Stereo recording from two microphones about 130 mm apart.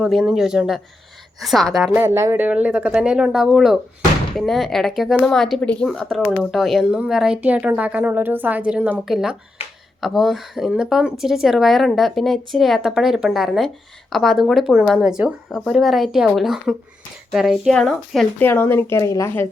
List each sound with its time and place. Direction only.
0.0 s speech: centre (ahead or behind)
1.9 s speech: 20° right (ahead or behind); by 6.2 s centre (ahead or behind)
6.2 s speech: 15° left (ahead or behind)
6.5 s speech: centre (ahead or behind)
18.3 s speech: 20° left (ahead or behind)